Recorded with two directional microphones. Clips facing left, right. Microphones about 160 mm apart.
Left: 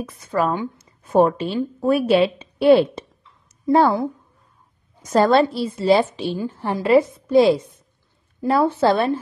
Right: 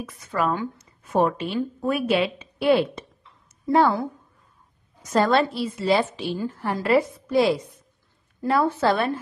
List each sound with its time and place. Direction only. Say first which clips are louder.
0.0 s a woman's voice: left 4 dB; 30° left (ahead or behind)
5.1 s a woman's voice: left 4 dB; 35° left (ahead or behind)